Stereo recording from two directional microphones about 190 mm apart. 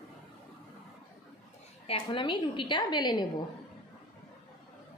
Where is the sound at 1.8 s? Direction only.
25° left (ahead or behind).